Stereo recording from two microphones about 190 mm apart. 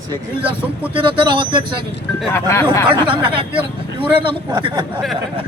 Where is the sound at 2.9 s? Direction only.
25° right (ahead or behind).